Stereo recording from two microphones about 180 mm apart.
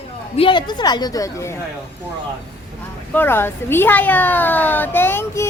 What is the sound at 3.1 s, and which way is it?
Speech, 10° left (ahead or behind).